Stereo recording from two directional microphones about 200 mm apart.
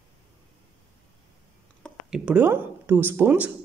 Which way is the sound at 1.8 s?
5° right (ahead or behind).